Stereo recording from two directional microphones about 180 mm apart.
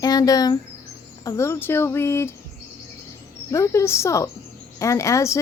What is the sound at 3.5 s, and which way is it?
A woman's voice, 15° left (ahead or behind).